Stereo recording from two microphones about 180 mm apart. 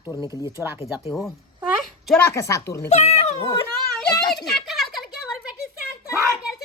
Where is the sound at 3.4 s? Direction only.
15° left (ahead or behind).